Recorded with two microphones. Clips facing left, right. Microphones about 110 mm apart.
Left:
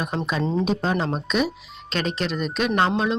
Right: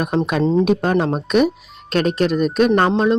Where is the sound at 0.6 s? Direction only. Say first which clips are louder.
Right 6 dB; 60° right (ahead or behind).